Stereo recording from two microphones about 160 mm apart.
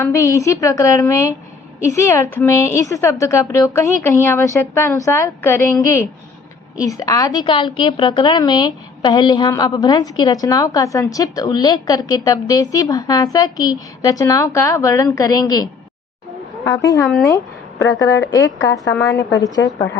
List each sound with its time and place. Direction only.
0.0 s a woman's voice: 20° left (ahead or behind)
18.0 s a woman's voice: 20° left (ahead or behind)